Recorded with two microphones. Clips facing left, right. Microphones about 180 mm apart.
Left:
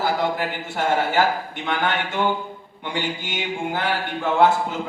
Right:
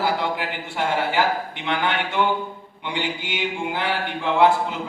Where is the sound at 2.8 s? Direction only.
45° left (ahead or behind).